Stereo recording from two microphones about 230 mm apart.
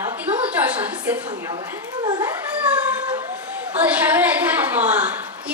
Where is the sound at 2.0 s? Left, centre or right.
Centre.